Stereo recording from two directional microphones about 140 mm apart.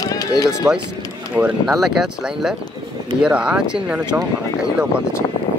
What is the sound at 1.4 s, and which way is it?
Speech, 5° right (ahead or behind).